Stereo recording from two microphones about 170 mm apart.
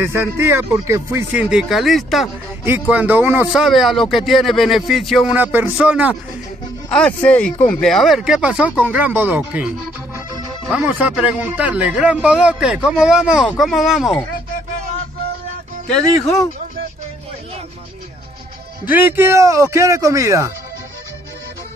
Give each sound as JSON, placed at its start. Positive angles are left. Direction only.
{"t": 0.0, "sound": "speech", "side_deg": -15}
{"t": 2.6, "sound": "speech", "side_deg": -10}
{"t": 3.6, "sound": "speech", "side_deg": 0}
{"t": 6.9, "sound": "speech", "side_deg": 5}
{"t": 10.7, "sound": "speech", "side_deg": -10}
{"t": 18.9, "sound": "a man's voice", "side_deg": -10}